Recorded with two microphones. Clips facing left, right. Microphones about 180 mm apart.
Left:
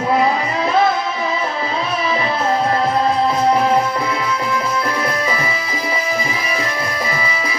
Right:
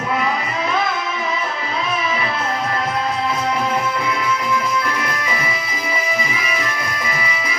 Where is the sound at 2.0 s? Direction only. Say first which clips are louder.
Left 4 dB; 35° left (ahead or behind).